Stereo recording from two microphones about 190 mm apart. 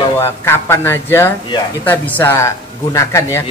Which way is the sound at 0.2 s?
15° left (ahead or behind).